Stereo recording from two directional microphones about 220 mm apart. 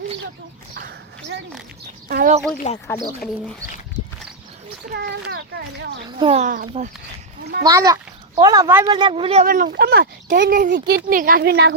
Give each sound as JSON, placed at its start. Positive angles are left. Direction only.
{"t": 2.0, "sound": "a woman's voice", "side_deg": -45}
{"t": 2.7, "sound": "speech", "side_deg": 35}
{"t": 4.9, "sound": "speech", "side_deg": -45}
{"t": 6.1, "sound": "speech", "side_deg": -25}
{"t": 6.5, "sound": "speech", "side_deg": -35}
{"t": 7.6, "sound": "a child's voice", "side_deg": -15}
{"t": 9.4, "sound": "speech", "side_deg": -35}